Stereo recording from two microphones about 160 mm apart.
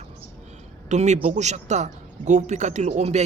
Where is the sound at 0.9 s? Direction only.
45° right (ahead or behind).